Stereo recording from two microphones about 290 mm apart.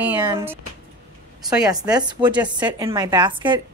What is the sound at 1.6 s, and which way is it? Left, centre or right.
A woman's voice, centre.